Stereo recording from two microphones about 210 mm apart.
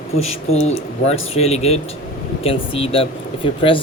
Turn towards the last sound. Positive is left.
turn(degrees=25)  # may be behind; listen again after turning